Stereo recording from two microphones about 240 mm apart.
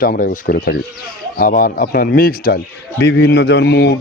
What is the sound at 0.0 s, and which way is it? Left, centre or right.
Speech, left.